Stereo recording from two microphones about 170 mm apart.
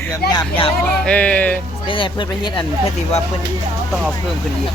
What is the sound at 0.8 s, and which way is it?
Speech, 5° left (ahead or behind).